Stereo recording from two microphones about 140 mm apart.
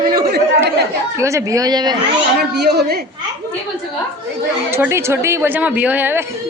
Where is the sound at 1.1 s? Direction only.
20° right (ahead or behind).